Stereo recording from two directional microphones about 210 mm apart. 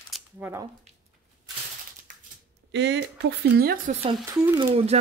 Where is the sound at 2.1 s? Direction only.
35° right (ahead or behind).